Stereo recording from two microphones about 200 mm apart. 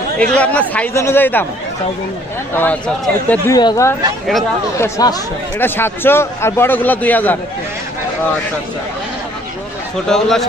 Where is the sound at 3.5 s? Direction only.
20° left (ahead or behind).